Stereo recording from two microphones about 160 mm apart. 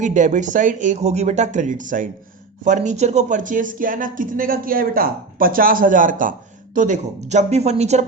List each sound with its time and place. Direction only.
0.0 s speech: 50° right (ahead or behind)